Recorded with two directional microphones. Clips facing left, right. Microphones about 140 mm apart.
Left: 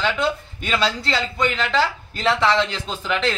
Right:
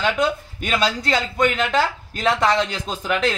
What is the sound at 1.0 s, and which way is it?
Speech, 50° right (ahead or behind).